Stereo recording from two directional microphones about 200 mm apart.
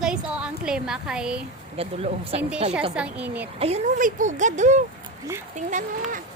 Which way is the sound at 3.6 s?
35° right (ahead or behind).